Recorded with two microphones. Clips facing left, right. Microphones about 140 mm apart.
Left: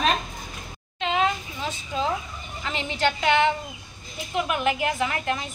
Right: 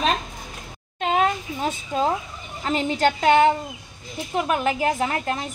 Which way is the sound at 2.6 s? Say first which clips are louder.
Right 5 dB; 40° right (ahead or behind).